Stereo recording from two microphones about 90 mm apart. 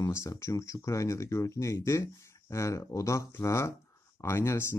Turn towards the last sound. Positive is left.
turn(degrees=30)  # may be behind; listen again after turning